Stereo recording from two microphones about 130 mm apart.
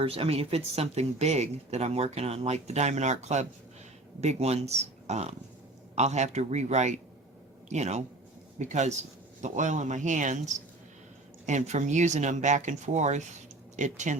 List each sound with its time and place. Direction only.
0.0 s speech: 45° right (ahead or behind); by 14.2 s 70° right (ahead or behind)